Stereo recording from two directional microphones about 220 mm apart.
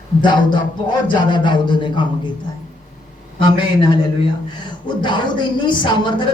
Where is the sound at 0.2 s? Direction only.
20° left (ahead or behind).